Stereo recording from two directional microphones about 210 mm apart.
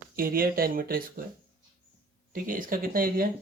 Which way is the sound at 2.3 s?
40° right (ahead or behind).